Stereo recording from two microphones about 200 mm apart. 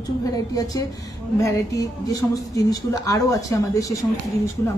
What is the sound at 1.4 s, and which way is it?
A woman's voice, 15° left (ahead or behind).